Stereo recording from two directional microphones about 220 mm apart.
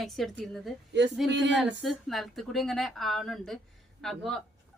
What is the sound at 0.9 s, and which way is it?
Speech, 50° right (ahead or behind).